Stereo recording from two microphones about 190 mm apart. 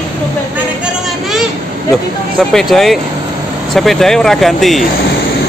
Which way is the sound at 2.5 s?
Centre (ahead or behind).